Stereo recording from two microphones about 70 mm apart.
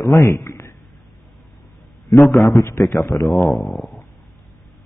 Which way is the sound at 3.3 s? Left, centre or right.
Centre.